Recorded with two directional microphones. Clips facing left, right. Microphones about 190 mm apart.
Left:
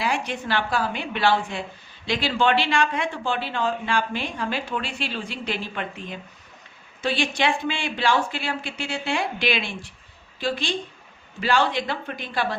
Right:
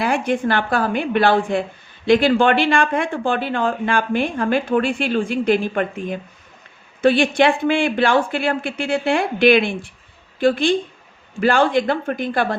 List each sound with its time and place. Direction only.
0.0 s speech: 50° right (ahead or behind)